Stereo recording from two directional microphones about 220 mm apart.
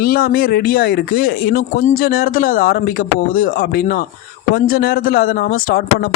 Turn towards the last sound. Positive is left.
turn(degrees=45)  # may be behind; listen again after turning